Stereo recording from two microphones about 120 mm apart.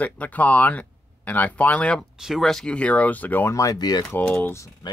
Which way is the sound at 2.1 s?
5° right (ahead or behind).